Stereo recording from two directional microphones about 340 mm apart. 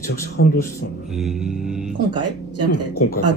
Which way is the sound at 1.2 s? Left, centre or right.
Centre.